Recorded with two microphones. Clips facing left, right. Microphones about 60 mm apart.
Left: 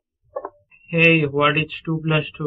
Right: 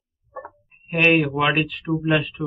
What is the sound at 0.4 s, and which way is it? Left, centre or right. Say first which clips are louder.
Speech: left 5 dB; centre.